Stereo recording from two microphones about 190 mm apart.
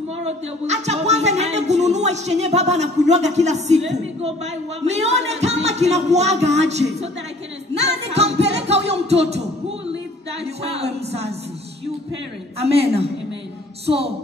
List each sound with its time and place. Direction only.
0.7 s speech: 35° right (ahead or behind)
7.7 s music: 35° right (ahead or behind)
8.5 s singing: 35° right (ahead or behind)
10.4 s a sound: 35° right (ahead or behind)
13.8 s speech: 30° right (ahead or behind)